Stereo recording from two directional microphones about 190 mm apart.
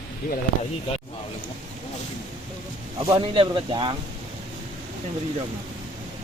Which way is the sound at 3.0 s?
25° right (ahead or behind).